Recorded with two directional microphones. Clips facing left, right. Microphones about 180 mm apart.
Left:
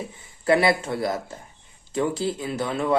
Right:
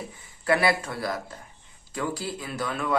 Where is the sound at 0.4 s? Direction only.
25° left (ahead or behind).